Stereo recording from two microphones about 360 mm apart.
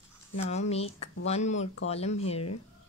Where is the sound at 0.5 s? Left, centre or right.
Centre.